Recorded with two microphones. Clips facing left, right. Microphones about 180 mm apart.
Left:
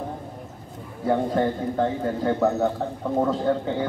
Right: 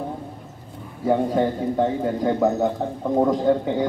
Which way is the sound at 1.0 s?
10° right (ahead or behind).